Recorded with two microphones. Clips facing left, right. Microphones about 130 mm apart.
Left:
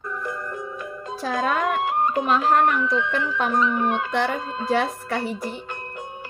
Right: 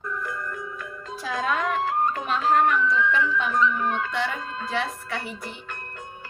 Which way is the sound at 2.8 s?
20° left (ahead or behind).